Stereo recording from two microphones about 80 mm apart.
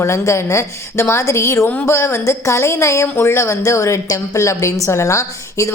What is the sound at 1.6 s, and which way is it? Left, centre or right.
A woman's voice, left.